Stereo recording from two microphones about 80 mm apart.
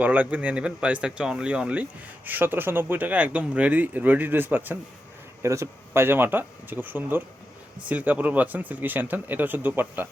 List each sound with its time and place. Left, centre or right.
0.0 s speech: centre
5.4 s speech: right